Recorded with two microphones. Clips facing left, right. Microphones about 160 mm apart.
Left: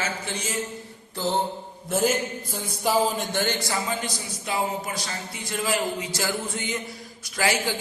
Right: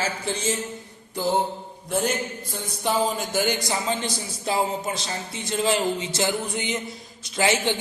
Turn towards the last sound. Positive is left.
turn(degrees=-25)  # may be behind; listen again after turning